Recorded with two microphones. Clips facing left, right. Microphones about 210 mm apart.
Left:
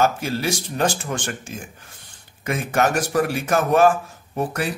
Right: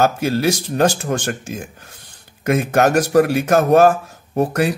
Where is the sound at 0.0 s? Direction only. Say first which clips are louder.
Right 5 dB; 40° right (ahead or behind).